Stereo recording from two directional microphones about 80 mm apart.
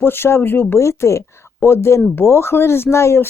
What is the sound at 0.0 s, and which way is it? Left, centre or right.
Speech, left.